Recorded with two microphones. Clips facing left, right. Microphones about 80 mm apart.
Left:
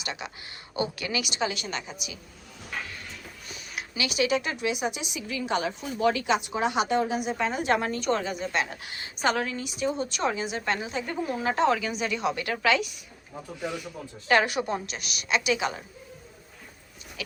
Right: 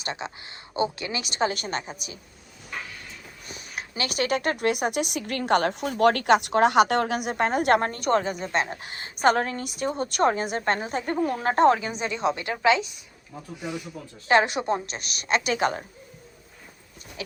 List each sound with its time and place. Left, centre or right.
0.0 s a woman's voice: right
3.5 s a woman's voice: right
17.2 s a woman's voice: right